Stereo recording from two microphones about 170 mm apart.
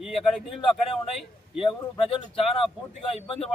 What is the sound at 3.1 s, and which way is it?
Speech, 5° left (ahead or behind).